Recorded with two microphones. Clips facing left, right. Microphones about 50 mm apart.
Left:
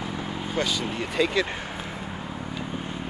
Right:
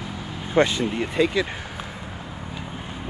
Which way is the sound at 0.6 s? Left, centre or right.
Right.